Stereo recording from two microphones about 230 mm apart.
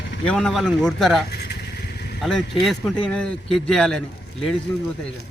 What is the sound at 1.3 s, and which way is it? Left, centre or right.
Vehicle, left.